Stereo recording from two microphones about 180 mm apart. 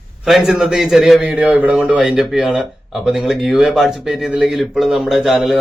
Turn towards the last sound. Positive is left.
turn(degrees=0)  # may be behind; listen again after turning